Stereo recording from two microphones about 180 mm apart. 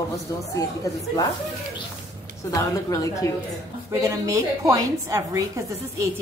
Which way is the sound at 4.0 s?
15° right (ahead or behind).